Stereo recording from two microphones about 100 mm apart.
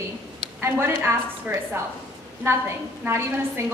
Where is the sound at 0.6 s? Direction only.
25° right (ahead or behind).